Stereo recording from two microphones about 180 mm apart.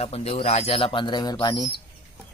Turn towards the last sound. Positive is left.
turn(degrees=25)  # may be behind; listen again after turning